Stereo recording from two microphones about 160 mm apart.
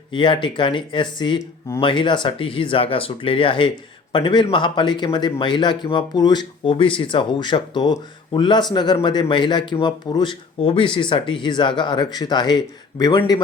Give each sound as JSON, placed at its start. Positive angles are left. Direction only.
{"t": 0.1, "sound": "speech", "side_deg": 30}